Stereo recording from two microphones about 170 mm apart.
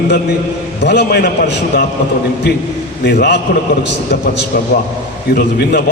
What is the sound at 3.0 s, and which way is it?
Speech, 75° left (ahead or behind).